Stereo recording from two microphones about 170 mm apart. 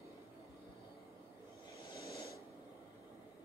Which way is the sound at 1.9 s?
15° right (ahead or behind).